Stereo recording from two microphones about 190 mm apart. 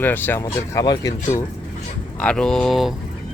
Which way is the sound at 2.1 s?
5° left (ahead or behind).